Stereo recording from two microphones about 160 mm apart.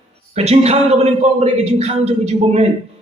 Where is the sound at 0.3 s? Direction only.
40° right (ahead or behind).